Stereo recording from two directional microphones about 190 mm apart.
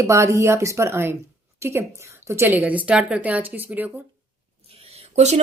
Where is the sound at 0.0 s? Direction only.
15° right (ahead or behind).